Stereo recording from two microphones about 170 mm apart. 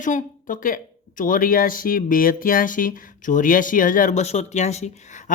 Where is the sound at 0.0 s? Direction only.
50° left (ahead or behind).